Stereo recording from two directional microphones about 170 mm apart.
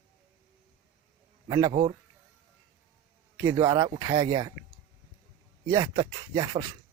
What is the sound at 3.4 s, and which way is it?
Speech, 20° right (ahead or behind).